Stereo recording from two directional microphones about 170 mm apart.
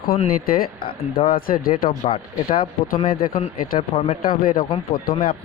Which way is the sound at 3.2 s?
55° left (ahead or behind).